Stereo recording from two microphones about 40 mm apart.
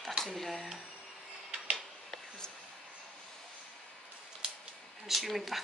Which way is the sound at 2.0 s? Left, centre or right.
Centre.